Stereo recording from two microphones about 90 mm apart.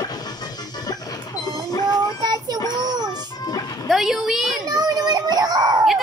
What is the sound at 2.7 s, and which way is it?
Music, 50° right (ahead or behind).